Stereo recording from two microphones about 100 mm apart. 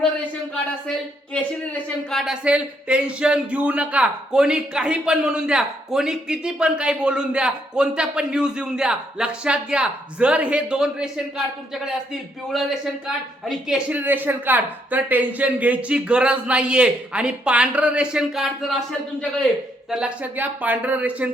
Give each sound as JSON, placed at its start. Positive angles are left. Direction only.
{"t": 2.0, "sound": "a man's voice", "side_deg": 0}
{"t": 14.0, "sound": "speech", "side_deg": -20}
{"t": 19.9, "sound": "speech", "side_deg": -15}